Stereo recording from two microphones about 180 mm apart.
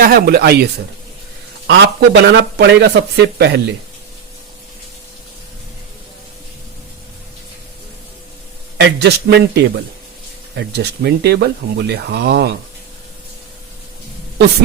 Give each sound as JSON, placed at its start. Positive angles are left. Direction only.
{"t": 0.0, "sound": "a man's voice", "side_deg": -55}
{"t": 8.8, "sound": "a man's voice", "side_deg": -65}